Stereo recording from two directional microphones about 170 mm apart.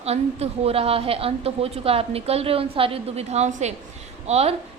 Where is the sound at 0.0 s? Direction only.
35° right (ahead or behind).